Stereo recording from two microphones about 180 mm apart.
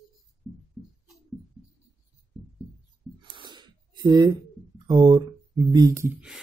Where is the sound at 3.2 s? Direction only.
25° right (ahead or behind).